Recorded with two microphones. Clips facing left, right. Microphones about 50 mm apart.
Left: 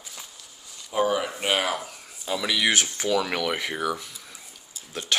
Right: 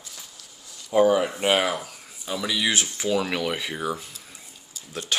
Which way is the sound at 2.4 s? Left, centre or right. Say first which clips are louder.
Left 1 dB; left.